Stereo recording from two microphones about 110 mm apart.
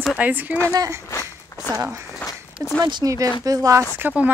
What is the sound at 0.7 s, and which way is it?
Speech, 30° right (ahead or behind).